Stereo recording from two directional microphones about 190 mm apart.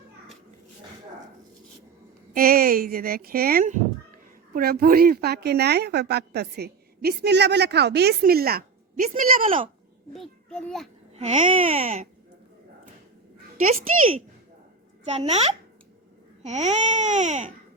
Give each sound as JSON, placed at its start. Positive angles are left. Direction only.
{"t": 2.3, "sound": "a woman's voice", "side_deg": -50}
{"t": 10.1, "sound": "a child's voice", "side_deg": 0}
{"t": 11.1, "sound": "baby cry", "side_deg": -35}
{"t": 15.0, "sound": "baby cry", "side_deg": -35}